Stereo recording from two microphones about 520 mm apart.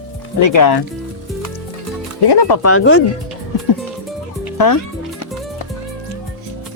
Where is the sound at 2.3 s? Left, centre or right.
Left.